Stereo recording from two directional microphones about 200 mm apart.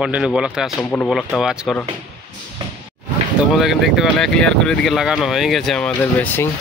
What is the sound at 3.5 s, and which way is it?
Speech, centre (ahead or behind).